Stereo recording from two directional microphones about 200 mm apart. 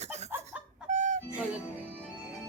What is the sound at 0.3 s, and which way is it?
Chicken, 10° right (ahead or behind).